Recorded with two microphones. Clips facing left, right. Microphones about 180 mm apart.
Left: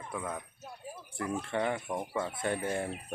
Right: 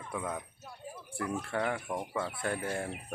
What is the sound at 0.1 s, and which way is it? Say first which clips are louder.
Speech: right 1 dB; centre (ahead or behind).